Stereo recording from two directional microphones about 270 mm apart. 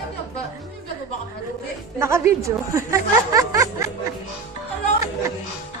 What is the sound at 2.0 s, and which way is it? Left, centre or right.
Speech, centre.